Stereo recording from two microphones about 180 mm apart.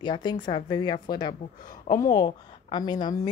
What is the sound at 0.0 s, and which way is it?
A woman's voice, 25° left (ahead or behind).